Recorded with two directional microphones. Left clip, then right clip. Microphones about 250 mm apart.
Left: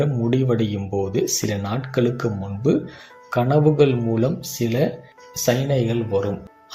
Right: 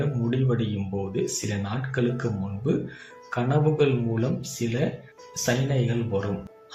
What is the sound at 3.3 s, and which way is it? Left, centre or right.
Speech, centre.